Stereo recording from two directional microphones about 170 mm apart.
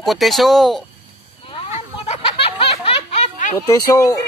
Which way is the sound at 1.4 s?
35° left (ahead or behind).